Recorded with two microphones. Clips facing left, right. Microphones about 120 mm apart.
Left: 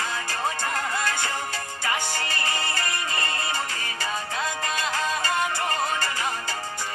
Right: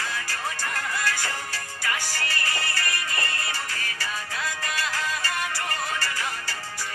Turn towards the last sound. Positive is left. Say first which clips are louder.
# left 4 dB
turn(degrees=25)  # may be behind; listen again after turning